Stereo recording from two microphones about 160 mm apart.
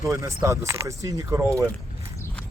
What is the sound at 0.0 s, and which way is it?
Speech, 20° right (ahead or behind).